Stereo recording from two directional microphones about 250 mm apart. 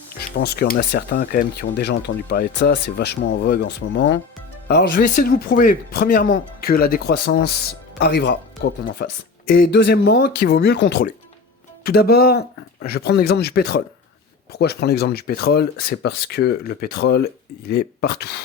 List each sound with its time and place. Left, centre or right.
0.2 s speech: left